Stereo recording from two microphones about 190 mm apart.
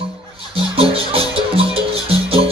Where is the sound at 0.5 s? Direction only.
30° right (ahead or behind).